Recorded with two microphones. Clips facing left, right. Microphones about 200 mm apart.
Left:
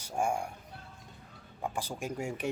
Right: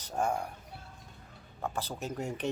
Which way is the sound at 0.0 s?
10° left (ahead or behind).